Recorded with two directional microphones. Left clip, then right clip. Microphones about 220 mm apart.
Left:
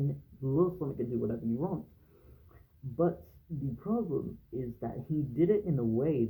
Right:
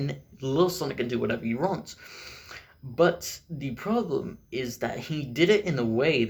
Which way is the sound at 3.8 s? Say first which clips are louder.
Right 7 dB; 30° right (ahead or behind).